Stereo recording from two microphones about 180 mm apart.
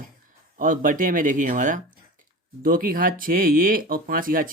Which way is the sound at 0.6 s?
50° right (ahead or behind).